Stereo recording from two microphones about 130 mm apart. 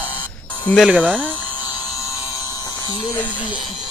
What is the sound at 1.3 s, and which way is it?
Electric toothbrush, 35° left (ahead or behind).